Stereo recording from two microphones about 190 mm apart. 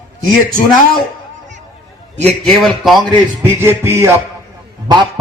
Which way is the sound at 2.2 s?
Centre (ahead or behind).